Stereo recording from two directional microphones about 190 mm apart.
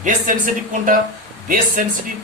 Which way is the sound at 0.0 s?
45° right (ahead or behind).